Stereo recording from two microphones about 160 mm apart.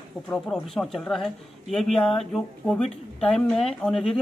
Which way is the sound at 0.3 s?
5° left (ahead or behind).